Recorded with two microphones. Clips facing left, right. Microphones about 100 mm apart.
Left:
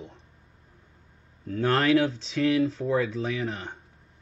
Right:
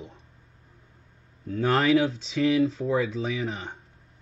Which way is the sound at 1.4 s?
Centre (ahead or behind).